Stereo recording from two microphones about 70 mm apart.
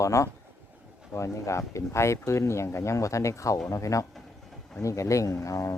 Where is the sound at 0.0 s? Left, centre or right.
Left.